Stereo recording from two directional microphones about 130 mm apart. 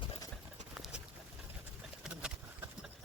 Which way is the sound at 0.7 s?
5° right (ahead or behind).